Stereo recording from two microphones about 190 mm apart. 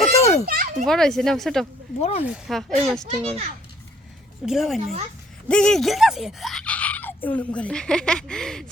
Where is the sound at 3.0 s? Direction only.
35° right (ahead or behind).